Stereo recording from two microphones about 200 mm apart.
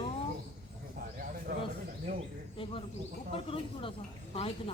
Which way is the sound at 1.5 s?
45° right (ahead or behind).